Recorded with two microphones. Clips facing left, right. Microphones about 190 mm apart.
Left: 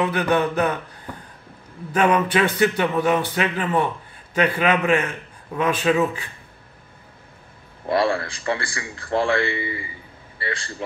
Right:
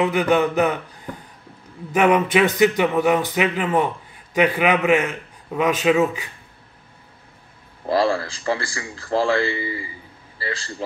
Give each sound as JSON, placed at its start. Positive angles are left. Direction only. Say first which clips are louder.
{"t": 0.0, "sound": "a man's voice", "louder": "right 2 dB", "side_deg": -15}
{"t": 1.9, "sound": "a man's voice", "louder": "right 2 dB", "side_deg": -20}
{"t": 7.9, "sound": "a man's voice", "louder": "right 1 dB", "side_deg": -30}